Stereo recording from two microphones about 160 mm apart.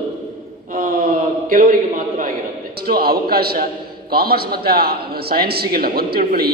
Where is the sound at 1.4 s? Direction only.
60° right (ahead or behind).